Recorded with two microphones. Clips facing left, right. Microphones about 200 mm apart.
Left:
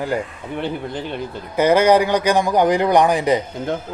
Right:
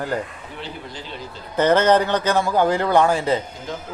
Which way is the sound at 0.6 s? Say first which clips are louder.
Left 10 dB; 55° left (ahead or behind).